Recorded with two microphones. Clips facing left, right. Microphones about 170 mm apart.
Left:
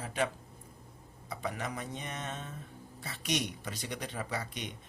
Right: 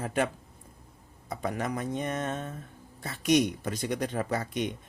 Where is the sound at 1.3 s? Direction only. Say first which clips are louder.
Right 6 dB; 45° right (ahead or behind).